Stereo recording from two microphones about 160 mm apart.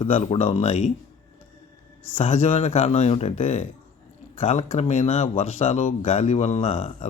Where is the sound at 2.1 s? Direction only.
45° left (ahead or behind).